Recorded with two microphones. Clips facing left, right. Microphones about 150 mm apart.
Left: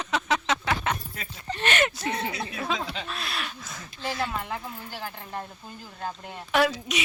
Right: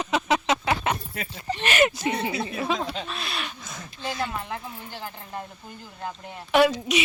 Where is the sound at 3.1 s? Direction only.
Centre (ahead or behind).